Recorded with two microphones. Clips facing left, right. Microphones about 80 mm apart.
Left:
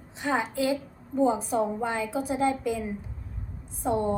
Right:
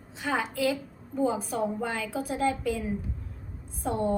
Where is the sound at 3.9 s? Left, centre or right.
Left.